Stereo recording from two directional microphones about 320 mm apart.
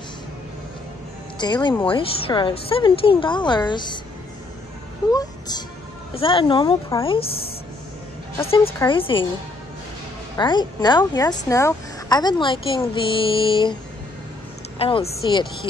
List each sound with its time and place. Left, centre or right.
1.4 s speech: centre
5.1 s speech: centre
8.4 s speech: centre
10.3 s speech: centre
14.8 s speech: centre